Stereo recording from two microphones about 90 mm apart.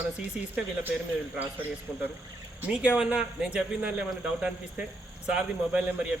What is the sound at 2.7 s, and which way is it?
Speech, 15° right (ahead or behind).